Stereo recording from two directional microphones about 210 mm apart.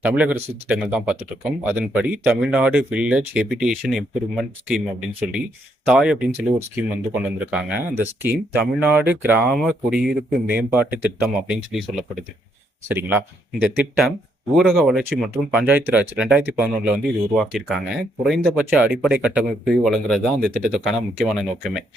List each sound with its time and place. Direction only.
0.0 s speech: 5° right (ahead or behind)
14.5 s speech: centre (ahead or behind)